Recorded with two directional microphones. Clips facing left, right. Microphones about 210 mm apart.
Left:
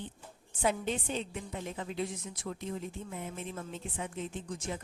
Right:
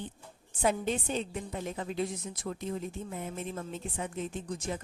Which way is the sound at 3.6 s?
40° right (ahead or behind).